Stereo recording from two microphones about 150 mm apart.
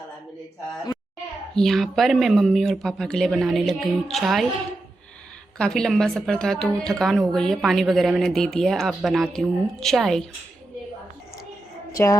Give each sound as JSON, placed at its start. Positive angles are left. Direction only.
{"t": 1.5, "sound": "a woman's voice", "side_deg": 0}
{"t": 5.5, "sound": "a woman's voice", "side_deg": 5}
{"t": 11.9, "sound": "a sound", "side_deg": 20}